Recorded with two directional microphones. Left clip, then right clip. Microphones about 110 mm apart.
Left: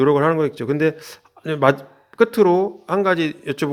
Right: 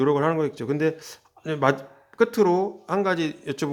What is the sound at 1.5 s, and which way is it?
A man's voice, 20° left (ahead or behind).